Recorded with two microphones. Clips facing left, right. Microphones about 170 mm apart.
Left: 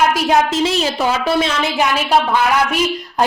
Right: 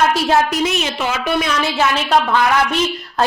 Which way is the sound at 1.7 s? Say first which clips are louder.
Even; 15° left (ahead or behind).